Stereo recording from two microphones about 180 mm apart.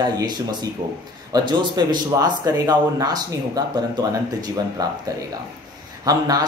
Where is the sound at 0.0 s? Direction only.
25° right (ahead or behind).